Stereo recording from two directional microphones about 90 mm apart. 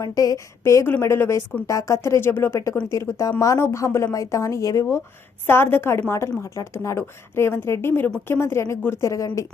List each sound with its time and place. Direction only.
0.0 s a woman's voice: 45° left (ahead or behind)
5.5 s a woman's voice: 25° left (ahead or behind)